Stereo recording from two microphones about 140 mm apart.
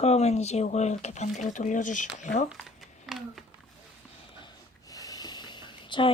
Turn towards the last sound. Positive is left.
turn(degrees=35)  # may be behind; listen again after turning